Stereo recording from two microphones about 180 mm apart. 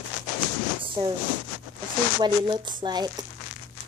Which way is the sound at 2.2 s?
25° right (ahead or behind).